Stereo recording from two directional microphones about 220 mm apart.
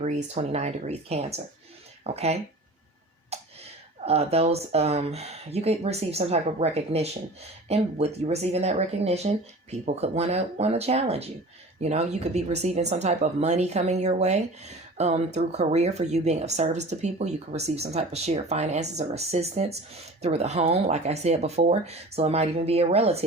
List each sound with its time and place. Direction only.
0.0 s speech: 30° right (ahead or behind)
3.3 s a sound: 30° right (ahead or behind)
4.0 s speech: 25° right (ahead or behind)